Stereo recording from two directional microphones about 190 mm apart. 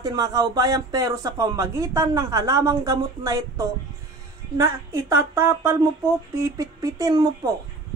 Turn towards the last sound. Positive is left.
turn(degrees=-20)  # may be behind; listen again after turning